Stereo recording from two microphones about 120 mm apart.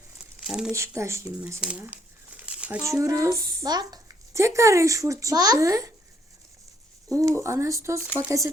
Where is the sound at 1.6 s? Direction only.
10° right (ahead or behind).